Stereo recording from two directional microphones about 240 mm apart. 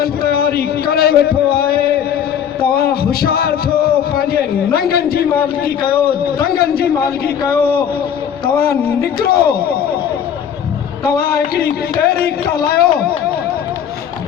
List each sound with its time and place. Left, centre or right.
0.0 s speech: left
8.5 s speech: left
11.2 s speech: left